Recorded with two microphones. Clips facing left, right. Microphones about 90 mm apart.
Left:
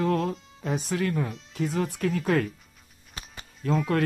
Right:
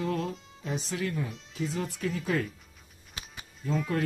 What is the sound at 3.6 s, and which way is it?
Speech, 65° left (ahead or behind).